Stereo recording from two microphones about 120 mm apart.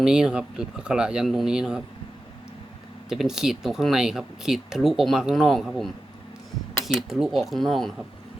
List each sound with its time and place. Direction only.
0.0 s speech: 5° right (ahead or behind)
3.1 s speech: 5° right (ahead or behind)